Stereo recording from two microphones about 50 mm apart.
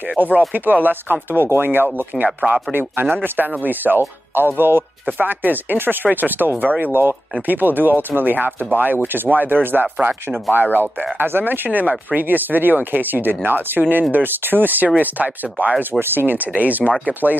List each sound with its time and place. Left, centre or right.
0.8 s speech: right
2.2 s speech: right
5.4 s speech: right
15.9 s speech: right
16.5 s speech: right